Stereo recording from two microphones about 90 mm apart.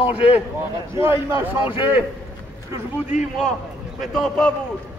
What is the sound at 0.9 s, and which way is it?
Speech, 30° right (ahead or behind).